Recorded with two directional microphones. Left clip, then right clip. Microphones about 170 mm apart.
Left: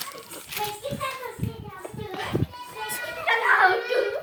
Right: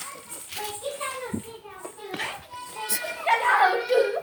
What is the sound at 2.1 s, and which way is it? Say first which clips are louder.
Children playing: right 2 dB; 25° right (ahead or behind).